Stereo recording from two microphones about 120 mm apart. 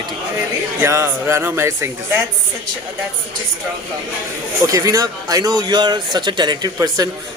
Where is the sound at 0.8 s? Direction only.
20° right (ahead or behind).